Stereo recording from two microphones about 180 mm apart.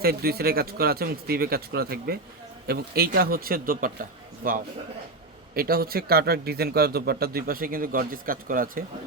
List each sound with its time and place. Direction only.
0.0 s a man's voice: 60° right (ahead or behind)